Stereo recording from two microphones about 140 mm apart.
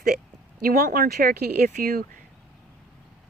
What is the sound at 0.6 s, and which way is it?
Speech, 90° right.